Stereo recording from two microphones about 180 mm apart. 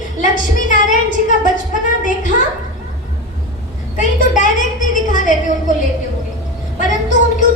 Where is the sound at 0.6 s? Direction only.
45° left (ahead or behind).